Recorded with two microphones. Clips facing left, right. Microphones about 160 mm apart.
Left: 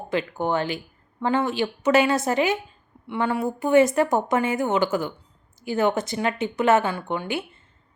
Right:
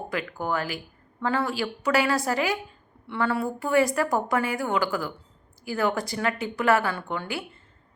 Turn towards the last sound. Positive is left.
turn(degrees=20)  # may be behind; listen again after turning